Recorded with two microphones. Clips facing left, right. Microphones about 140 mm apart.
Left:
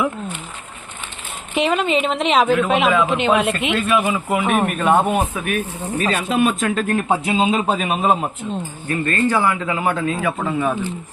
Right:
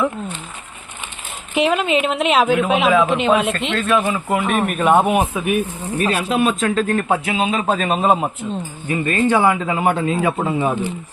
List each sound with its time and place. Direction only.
1.5 s speech: centre (ahead or behind)
6.9 s a man's voice: 20° left (ahead or behind)
7.7 s speech: 5° left (ahead or behind)
8.9 s a man's voice: 20° right (ahead or behind)